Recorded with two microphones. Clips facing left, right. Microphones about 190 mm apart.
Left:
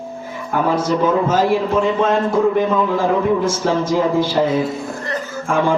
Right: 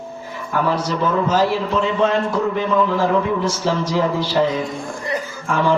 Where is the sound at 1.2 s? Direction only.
50° left (ahead or behind).